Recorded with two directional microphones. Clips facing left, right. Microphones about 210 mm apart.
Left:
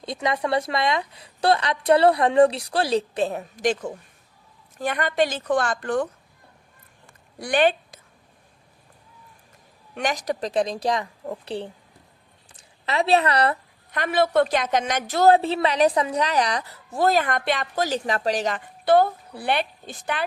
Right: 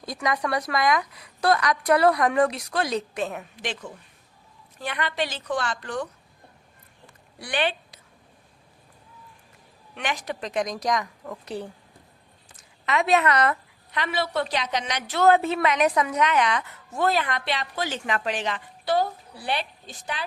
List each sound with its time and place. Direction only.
0.0 s a woman's voice: 25° left (ahead or behind); by 6.1 s 50° left (ahead or behind)
7.1 s a sound: 45° left (ahead or behind)
9.9 s a woman's voice: 40° left (ahead or behind)
13.9 s a woman's voice: 50° left (ahead or behind)